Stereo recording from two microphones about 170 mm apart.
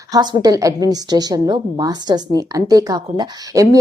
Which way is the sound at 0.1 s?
25° right (ahead or behind).